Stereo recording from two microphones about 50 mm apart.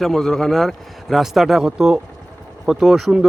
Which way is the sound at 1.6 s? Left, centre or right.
Centre.